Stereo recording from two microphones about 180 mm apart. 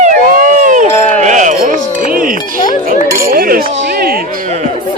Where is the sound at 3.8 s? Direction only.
65° right (ahead or behind).